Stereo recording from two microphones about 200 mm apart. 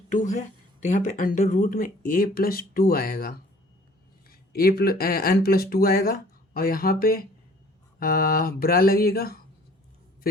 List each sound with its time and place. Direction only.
0.1 s speech: 40° left (ahead or behind)